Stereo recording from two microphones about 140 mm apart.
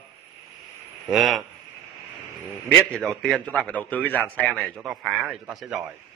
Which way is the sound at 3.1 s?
10° left (ahead or behind).